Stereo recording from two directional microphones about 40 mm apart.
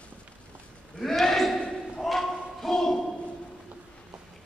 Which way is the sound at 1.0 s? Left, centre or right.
Centre.